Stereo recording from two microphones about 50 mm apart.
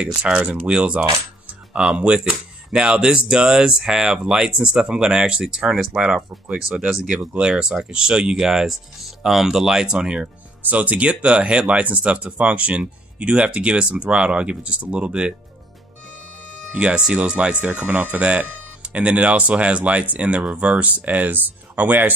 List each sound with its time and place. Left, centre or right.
0.0 s speech: right
16.7 s speech: right